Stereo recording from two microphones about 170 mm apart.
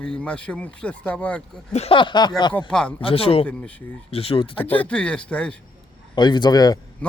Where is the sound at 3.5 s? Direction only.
10° left (ahead or behind).